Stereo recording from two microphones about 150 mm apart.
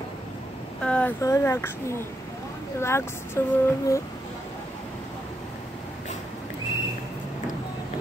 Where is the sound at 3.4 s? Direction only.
15° left (ahead or behind).